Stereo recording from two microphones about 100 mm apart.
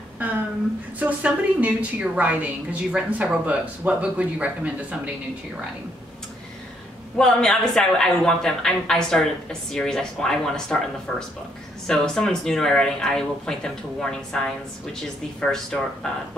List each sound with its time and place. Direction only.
0.2 s a sound: 15° right (ahead or behind)
0.9 s a woman's voice: 15° right (ahead or behind)
7.2 s a woman's voice: 5° left (ahead or behind)